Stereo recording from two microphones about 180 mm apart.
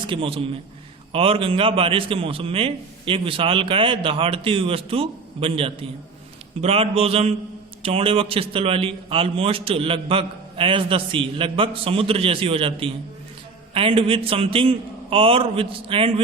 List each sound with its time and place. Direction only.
0.1 s a man's voice: 30° right (ahead or behind)